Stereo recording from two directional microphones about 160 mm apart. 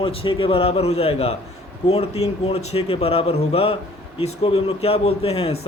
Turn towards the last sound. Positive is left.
turn(degrees=40)  # may be behind; listen again after turning